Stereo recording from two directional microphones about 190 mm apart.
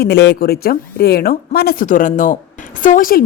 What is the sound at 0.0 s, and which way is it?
A woman's voice, 60° left (ahead or behind).